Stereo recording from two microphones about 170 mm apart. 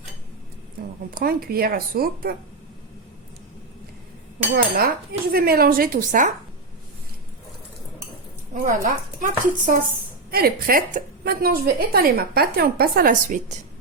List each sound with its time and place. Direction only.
1.1 s a woman's voice: 65° right (ahead or behind)
4.5 s a woman's voice: 60° right (ahead or behind)
8.5 s speech: 50° right (ahead or behind)
10.3 s a woman's voice: 60° right (ahead or behind)